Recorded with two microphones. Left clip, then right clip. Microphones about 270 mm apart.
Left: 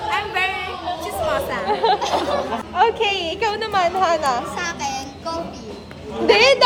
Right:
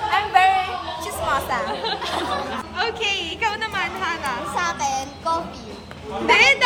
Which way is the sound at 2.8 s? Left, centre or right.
Centre.